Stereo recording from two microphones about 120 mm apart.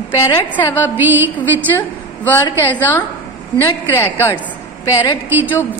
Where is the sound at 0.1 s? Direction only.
20° left (ahead or behind).